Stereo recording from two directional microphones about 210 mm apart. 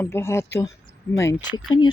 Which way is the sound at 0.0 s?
10° left (ahead or behind).